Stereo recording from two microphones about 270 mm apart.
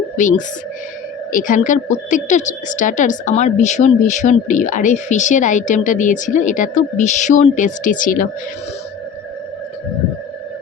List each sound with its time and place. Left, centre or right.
0.2 s a woman's voice: left